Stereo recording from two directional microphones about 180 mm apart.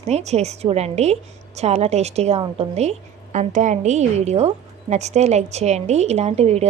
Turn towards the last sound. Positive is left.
turn(degrees=-35)  # may be behind; listen again after turning